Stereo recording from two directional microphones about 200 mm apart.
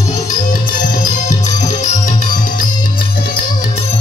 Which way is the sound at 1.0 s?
40° left (ahead or behind).